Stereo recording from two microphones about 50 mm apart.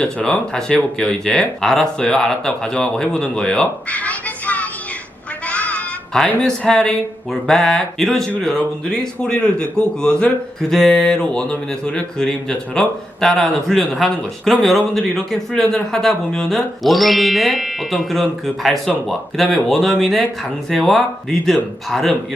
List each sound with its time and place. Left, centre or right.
0.0 s speech: centre
3.8 s music: left
5.5 s a sound: left
6.7 s speech: centre